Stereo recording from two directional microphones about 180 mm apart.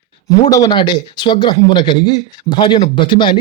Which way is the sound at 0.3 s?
20° left (ahead or behind).